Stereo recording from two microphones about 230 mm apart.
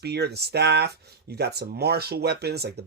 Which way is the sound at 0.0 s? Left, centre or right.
Right.